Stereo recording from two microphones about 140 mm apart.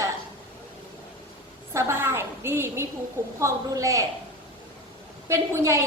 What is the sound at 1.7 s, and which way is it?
A woman's voice, 20° right (ahead or behind).